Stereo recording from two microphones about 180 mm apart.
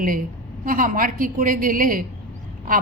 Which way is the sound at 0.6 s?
50° right (ahead or behind).